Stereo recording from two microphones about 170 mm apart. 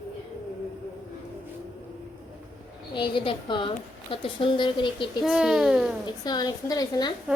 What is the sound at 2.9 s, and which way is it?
A woman's voice, 30° left (ahead or behind).